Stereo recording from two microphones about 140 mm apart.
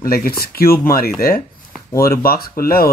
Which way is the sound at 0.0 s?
90° left.